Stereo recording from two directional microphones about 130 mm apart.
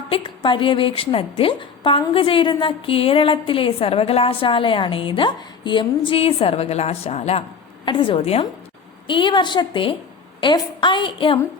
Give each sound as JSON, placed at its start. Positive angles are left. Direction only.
{"t": 0.1, "sound": "a woman's voice", "side_deg": 40}
{"t": 6.1, "sound": "a woman's voice", "side_deg": 50}
{"t": 7.9, "sound": "a woman's voice", "side_deg": 40}
{"t": 9.0, "sound": "a woman's voice", "side_deg": 40}